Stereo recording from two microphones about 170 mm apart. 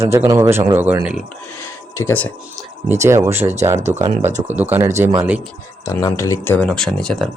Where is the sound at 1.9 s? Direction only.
10° left (ahead or behind).